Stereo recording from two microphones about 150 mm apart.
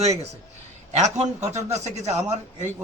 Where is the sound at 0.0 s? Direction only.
45° right (ahead or behind).